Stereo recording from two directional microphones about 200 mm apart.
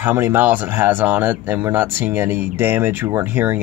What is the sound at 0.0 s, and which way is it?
Speech, 10° right (ahead or behind).